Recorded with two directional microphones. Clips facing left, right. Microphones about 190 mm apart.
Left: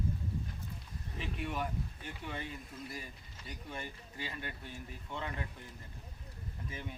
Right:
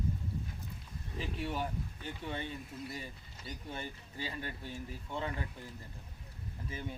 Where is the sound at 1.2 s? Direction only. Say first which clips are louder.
Right 1 dB; 30° right (ahead or behind).